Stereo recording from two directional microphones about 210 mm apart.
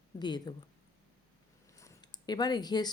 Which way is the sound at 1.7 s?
15° left (ahead or behind).